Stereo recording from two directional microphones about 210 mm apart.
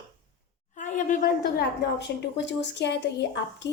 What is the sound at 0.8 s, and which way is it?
A woman's voice, 35° left (ahead or behind).